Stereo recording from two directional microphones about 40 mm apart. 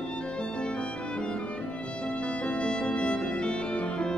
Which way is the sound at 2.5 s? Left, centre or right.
Left.